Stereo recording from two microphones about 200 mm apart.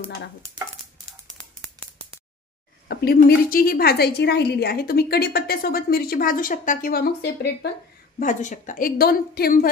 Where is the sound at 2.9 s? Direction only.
50° left (ahead or behind).